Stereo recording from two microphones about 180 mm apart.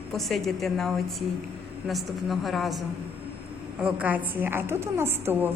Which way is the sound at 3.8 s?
5° right (ahead or behind).